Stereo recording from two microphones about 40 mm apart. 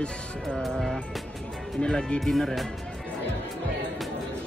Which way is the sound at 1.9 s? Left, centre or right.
Left.